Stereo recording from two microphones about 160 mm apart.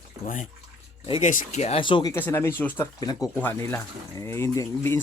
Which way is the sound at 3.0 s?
25° left (ahead or behind).